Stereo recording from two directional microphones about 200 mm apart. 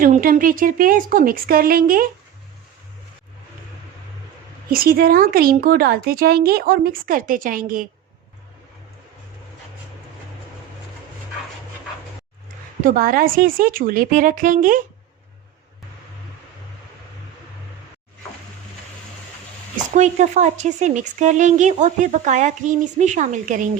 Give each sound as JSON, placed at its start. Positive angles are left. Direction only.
{"t": 0.0, "sound": "speech", "side_deg": -45}
{"t": 4.7, "sound": "speech", "side_deg": -45}
{"t": 12.8, "sound": "speech", "side_deg": -45}
{"t": 19.7, "sound": "speech", "side_deg": -40}